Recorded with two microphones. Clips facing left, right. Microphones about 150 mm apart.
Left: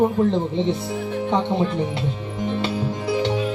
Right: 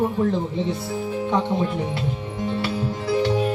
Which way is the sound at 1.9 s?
20° left (ahead or behind).